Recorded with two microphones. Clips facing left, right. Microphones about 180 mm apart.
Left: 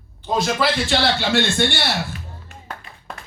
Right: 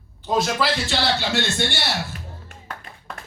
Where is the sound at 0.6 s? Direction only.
55° left (ahead or behind).